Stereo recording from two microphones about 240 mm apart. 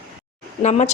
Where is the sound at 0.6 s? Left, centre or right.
Left.